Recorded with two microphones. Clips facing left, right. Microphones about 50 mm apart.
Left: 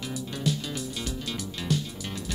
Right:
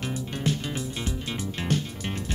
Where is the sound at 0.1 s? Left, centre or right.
Right.